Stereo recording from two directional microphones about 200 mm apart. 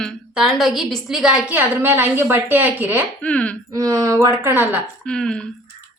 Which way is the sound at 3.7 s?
15° right (ahead or behind).